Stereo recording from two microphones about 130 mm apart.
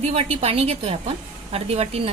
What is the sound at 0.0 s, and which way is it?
A woman's voice, 50° right (ahead or behind).